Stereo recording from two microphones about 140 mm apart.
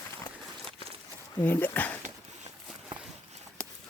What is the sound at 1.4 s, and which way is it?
Speech, 10° left (ahead or behind).